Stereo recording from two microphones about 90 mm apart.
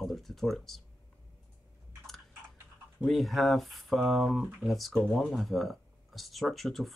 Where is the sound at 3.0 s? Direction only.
Centre (ahead or behind).